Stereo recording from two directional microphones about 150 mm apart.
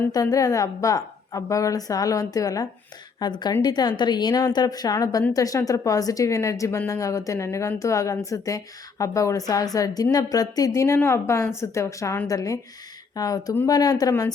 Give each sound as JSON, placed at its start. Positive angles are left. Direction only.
{"t": 0.1, "sound": "a woman's voice", "side_deg": 20}